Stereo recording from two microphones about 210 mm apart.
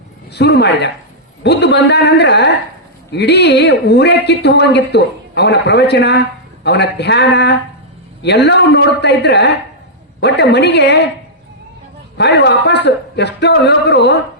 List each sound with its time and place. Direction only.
0.3 s speech: 55° left (ahead or behind)
12.1 s speech: 55° left (ahead or behind)